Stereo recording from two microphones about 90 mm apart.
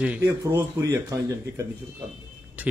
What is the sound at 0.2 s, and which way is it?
Speech, 30° right (ahead or behind).